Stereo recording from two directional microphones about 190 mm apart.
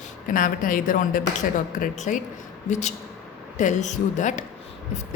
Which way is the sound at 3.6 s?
40° left (ahead or behind).